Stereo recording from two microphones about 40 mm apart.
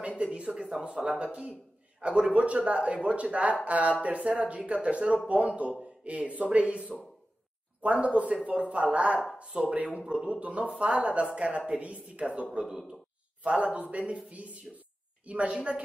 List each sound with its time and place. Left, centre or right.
0.2 s speech: right
1.3 s a man's voice: right